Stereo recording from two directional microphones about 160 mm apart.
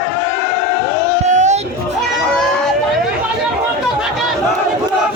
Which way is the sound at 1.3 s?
45° right (ahead or behind).